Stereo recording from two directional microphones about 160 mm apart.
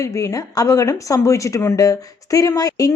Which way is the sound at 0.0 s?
20° left (ahead or behind).